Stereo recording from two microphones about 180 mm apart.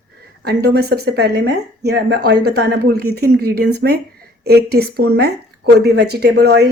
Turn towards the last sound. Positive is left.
turn(degrees=-65)  # may be behind; listen again after turning